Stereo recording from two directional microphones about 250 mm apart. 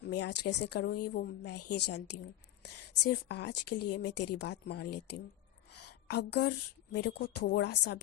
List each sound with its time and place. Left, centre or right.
0.0 s a woman's voice: left
5.7 s a sound: left
6.9 s a woman's voice: left